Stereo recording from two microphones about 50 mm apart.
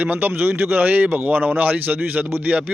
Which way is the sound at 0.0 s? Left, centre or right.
Right.